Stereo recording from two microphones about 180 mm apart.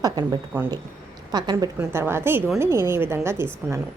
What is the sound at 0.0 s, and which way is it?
A woman's voice, 25° right (ahead or behind).